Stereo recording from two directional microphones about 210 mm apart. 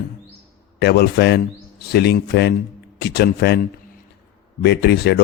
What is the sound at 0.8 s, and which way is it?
Speech, 50° left (ahead or behind).